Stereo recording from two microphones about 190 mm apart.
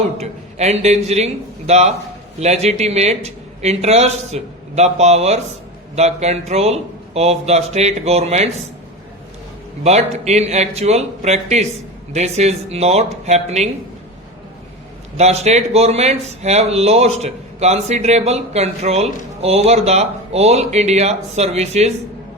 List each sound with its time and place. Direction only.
0.2 s speech: 35° right (ahead or behind)
9.8 s speech: 35° right (ahead or behind)
15.2 s speech: 35° right (ahead or behind)